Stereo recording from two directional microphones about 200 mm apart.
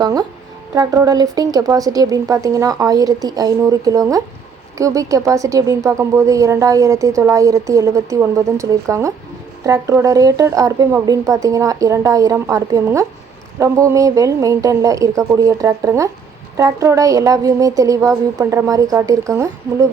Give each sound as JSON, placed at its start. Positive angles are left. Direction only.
{"t": 0.0, "sound": "a woman's voice", "side_deg": -20}